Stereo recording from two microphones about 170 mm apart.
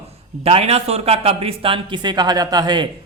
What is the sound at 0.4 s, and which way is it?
A man's voice, 35° right (ahead or behind).